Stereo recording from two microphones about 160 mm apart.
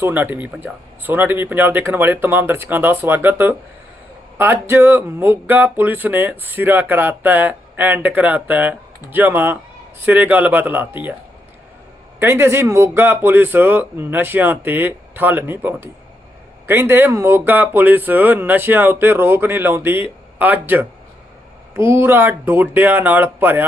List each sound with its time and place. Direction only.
0.0 s speech: 10° right (ahead or behind)
12.2 s speech: 15° right (ahead or behind)